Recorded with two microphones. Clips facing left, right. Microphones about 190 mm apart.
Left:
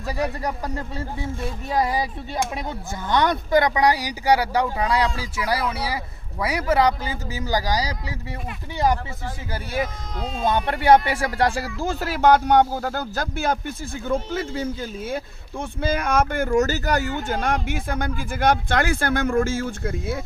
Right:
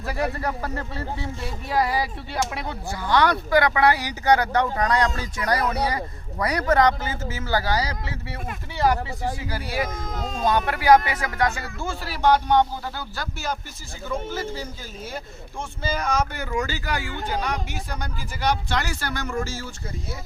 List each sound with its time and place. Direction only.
0.1 s speech: 15° left (ahead or behind)
10.4 s speech: 25° left (ahead or behind)
12.2 s speech: 50° left (ahead or behind)